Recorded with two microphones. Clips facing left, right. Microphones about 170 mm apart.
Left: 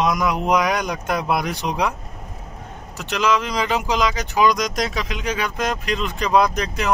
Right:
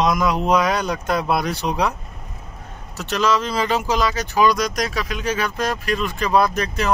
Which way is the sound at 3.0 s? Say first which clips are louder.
Right 1 dB; 15° left (ahead or behind).